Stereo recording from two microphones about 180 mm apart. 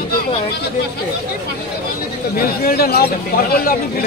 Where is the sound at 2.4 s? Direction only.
55° left (ahead or behind).